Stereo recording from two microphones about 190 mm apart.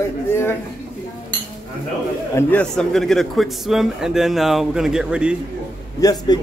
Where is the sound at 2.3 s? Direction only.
5° left (ahead or behind).